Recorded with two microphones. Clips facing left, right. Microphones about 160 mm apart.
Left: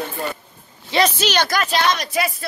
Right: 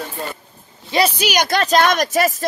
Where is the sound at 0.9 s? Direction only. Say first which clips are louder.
Right 1 dB; 10° right (ahead or behind).